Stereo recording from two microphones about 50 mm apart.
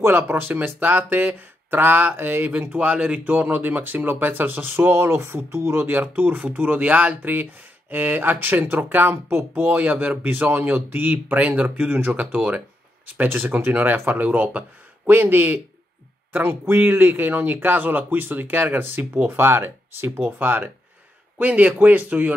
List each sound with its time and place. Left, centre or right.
0.0 s speech: right
2.9 s speech: right
9.7 s speech: right
15.0 s speech: right
21.4 s speech: right